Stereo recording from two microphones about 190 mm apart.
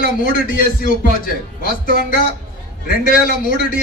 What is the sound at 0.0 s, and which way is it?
A man's voice, 50° left (ahead or behind).